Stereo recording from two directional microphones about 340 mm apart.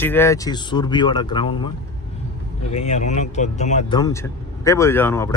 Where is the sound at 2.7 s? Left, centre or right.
Centre.